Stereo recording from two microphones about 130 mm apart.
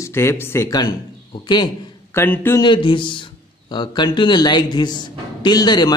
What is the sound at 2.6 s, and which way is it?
A man's voice, 40° left (ahead or behind).